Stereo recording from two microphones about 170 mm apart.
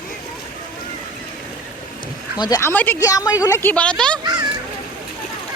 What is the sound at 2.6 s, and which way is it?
A woman's voice, 10° left (ahead or behind).